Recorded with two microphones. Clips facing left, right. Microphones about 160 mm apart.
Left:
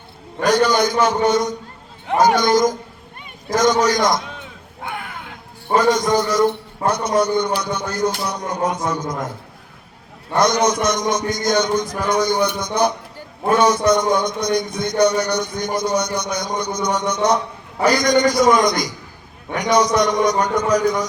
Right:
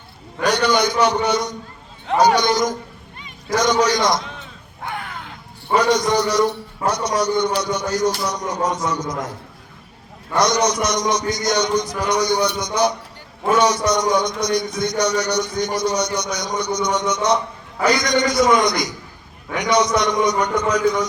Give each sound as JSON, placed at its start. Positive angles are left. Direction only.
{"t": 0.4, "sound": "a man's voice", "side_deg": 50}
{"t": 5.7, "sound": "a man's voice", "side_deg": 50}
{"t": 10.3, "sound": "a man's voice", "side_deg": 50}
{"t": 19.5, "sound": "a man's voice", "side_deg": 45}